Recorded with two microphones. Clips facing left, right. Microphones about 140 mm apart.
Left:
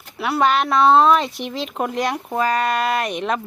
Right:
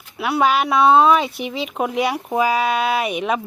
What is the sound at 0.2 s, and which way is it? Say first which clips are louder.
Speech: right 1 dB; centre (ahead or behind).